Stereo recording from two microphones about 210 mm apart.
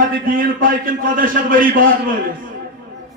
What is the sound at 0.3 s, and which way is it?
A man's voice, 40° right (ahead or behind).